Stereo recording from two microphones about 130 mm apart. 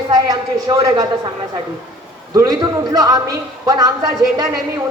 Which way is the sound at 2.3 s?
30° right (ahead or behind).